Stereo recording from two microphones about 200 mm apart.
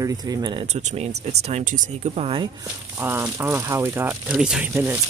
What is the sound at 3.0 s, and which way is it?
Speech, 10° right (ahead or behind).